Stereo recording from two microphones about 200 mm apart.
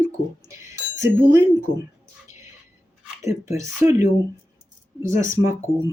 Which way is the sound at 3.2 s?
15° right (ahead or behind).